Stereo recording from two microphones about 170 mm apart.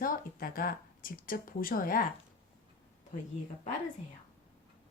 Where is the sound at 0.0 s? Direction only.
55° left (ahead or behind).